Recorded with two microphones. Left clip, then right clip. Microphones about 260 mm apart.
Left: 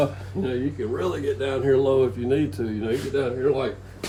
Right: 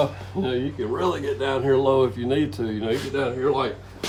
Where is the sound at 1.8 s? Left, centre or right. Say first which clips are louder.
Right 1 dB; centre.